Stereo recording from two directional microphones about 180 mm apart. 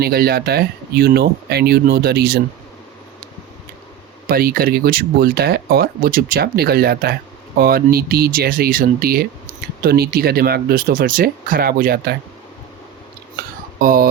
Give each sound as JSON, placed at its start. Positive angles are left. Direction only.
{"t": 0.0, "sound": "speech", "side_deg": -60}
{"t": 4.3, "sound": "speech", "side_deg": -55}
{"t": 13.7, "sound": "speech", "side_deg": -50}